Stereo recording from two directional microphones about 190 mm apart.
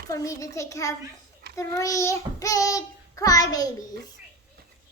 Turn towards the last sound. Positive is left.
turn(degrees=20)  # may be behind; listen again after turning